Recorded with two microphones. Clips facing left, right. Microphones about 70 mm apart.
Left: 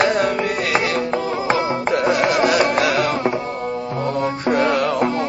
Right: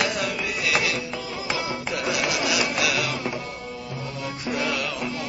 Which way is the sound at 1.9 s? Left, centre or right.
Left.